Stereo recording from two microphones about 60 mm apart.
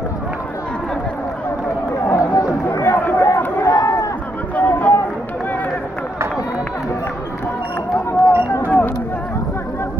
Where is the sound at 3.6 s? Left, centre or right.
Left.